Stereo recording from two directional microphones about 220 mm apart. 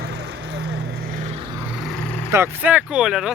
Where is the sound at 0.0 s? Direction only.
50° right (ahead or behind).